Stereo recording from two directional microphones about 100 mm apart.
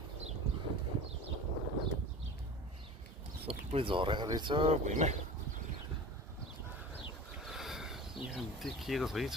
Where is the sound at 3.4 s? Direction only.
75° right (ahead or behind); by 4.7 s 55° right (ahead or behind).